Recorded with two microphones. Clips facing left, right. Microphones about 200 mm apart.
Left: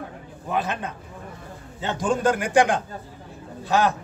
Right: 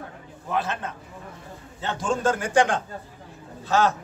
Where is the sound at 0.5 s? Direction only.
15° left (ahead or behind).